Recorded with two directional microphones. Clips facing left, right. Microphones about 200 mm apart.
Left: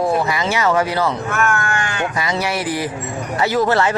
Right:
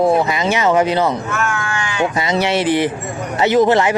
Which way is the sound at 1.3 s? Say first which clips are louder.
Left 2 dB; 50° left (ahead or behind).